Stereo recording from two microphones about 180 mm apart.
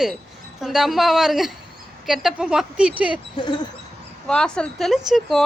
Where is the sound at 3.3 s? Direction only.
25° left (ahead or behind).